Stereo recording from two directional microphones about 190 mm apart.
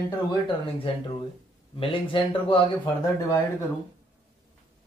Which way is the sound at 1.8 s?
25° left (ahead or behind).